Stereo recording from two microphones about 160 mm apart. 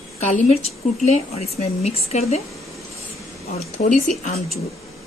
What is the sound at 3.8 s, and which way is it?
Speech, 50° left (ahead or behind).